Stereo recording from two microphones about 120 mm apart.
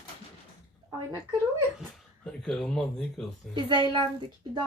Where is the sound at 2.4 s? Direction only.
5° left (ahead or behind).